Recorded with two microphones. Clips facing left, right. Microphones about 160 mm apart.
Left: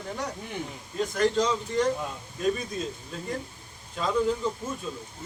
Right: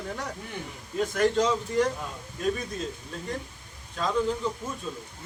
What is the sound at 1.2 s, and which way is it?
Speech, 5° right (ahead or behind).